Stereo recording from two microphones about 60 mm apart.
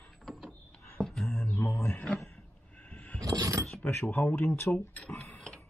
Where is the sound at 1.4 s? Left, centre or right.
Left.